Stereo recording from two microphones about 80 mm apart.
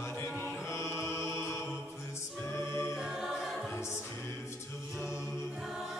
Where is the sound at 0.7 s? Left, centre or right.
Left.